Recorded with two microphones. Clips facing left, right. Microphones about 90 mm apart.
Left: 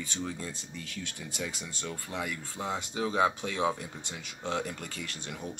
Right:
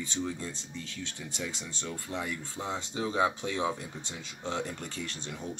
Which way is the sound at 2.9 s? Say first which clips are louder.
Left 1 dB; 20° left (ahead or behind).